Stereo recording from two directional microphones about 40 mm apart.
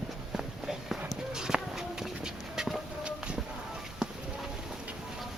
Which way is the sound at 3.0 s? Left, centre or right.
Right.